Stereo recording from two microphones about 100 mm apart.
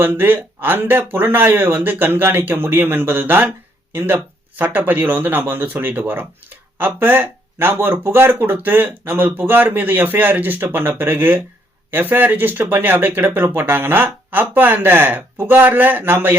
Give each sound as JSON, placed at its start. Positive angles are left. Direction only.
{"t": 0.0, "sound": "speech", "side_deg": -20}